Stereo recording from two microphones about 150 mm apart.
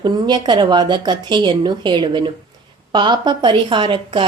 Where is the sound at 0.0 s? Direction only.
30° right (ahead or behind).